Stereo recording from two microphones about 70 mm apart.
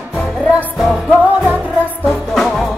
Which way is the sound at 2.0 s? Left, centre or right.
Centre.